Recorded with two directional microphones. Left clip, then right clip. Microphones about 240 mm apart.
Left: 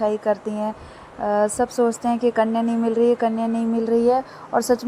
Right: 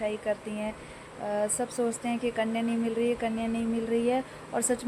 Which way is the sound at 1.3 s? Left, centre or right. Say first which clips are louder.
Left 10 dB; centre.